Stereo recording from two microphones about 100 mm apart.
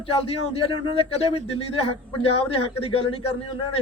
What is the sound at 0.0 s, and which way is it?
Speech, 70° left (ahead or behind).